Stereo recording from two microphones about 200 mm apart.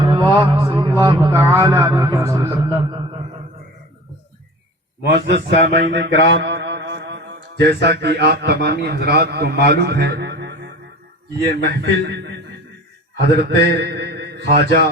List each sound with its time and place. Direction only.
0.0 s speech: 25° right (ahead or behind)
5.6 s mantra: 60° right (ahead or behind)
11.5 s a man's voice: 55° right (ahead or behind)